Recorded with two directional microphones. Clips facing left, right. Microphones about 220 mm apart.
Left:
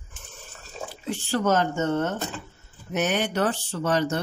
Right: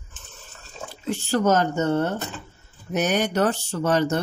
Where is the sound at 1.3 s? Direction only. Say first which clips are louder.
Right 3 dB; 40° right (ahead or behind).